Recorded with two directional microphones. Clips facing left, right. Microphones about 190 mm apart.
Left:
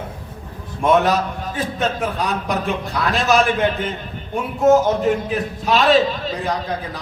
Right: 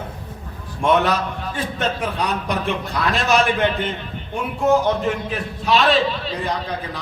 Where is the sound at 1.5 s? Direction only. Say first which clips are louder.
Left 2 dB; centre (ahead or behind).